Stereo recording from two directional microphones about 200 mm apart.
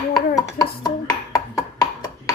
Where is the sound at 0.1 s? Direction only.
20° left (ahead or behind).